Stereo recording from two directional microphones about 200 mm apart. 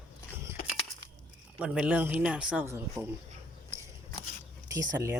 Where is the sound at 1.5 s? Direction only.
5° right (ahead or behind).